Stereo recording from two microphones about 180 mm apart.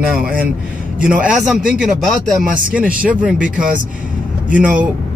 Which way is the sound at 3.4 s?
50° right (ahead or behind).